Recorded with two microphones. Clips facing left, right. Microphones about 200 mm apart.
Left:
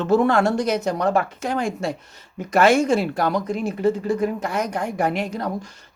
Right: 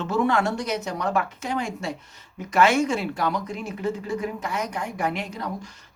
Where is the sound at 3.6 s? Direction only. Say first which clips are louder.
Left 9 dB; 30° left (ahead or behind).